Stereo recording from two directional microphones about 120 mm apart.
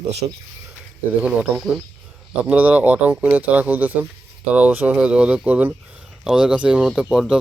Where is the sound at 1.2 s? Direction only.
10° right (ahead or behind).